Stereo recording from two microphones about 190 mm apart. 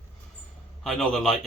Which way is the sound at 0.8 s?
Centre (ahead or behind).